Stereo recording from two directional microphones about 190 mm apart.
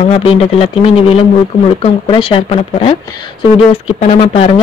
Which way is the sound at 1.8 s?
30° left (ahead or behind).